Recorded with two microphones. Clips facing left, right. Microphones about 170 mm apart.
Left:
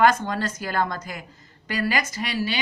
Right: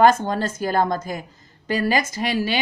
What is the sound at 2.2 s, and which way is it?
Speech, 45° right (ahead or behind).